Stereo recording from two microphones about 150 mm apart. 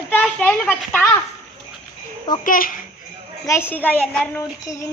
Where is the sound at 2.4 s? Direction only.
65° left (ahead or behind).